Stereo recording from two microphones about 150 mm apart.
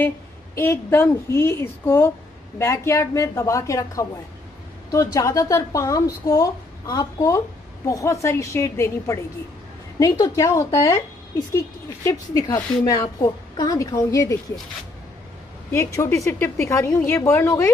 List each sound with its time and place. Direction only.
0.6 s a woman's voice: 15° left (ahead or behind)
16.0 s a woman's voice: 20° left (ahead or behind)